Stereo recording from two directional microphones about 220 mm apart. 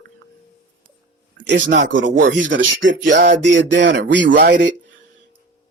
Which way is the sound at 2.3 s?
60° right (ahead or behind).